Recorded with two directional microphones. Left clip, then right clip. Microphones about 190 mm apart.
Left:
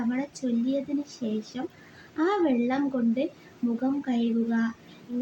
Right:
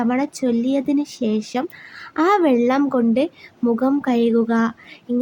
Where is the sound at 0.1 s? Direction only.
50° right (ahead or behind).